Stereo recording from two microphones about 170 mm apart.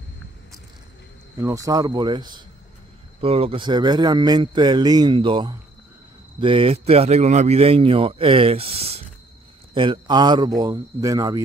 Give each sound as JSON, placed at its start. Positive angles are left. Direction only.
{"t": 1.4, "sound": "a man's voice", "side_deg": -20}